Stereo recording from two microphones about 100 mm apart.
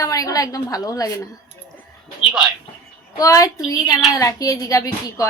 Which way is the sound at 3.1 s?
35° left (ahead or behind).